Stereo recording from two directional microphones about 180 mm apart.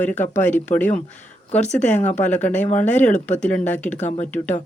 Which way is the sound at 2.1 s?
10° left (ahead or behind).